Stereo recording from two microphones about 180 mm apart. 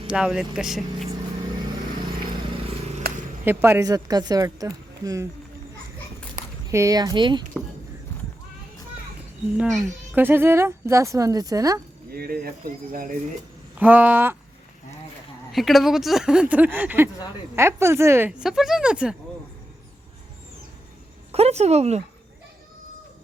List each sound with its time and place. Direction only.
0.1 s speech: 5° right (ahead or behind)
3.4 s speech: 10° right (ahead or behind)
6.7 s speech: 15° right (ahead or behind)
9.6 s a child's voice: 5° right (ahead or behind); by 11.8 s 20° right (ahead or behind)
12.1 s speech: 55° right (ahead or behind)
13.7 s speech: 10° right (ahead or behind)
15.5 s speech: centre (ahead or behind)
21.3 s speech: 35° right (ahead or behind)